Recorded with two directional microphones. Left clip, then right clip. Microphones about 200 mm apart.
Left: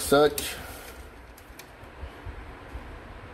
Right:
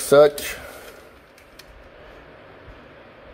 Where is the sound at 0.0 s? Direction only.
40° right (ahead or behind).